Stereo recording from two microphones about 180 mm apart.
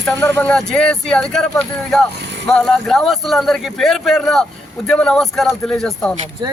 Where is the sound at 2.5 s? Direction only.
Centre (ahead or behind).